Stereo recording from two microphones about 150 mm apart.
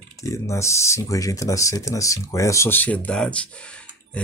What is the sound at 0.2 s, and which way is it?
Speech, 20° left (ahead or behind).